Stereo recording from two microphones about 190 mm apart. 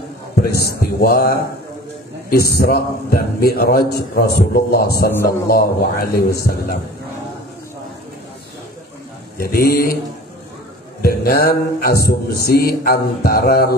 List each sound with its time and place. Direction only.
0.4 s a man's voice: 55° left (ahead or behind)
9.4 s a man's voice: 50° left (ahead or behind)
11.0 s a man's voice: 55° left (ahead or behind)